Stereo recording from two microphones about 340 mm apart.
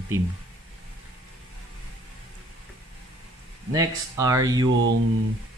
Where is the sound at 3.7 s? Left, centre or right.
Centre.